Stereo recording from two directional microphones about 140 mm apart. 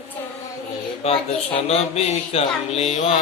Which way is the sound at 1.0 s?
45° left (ahead or behind).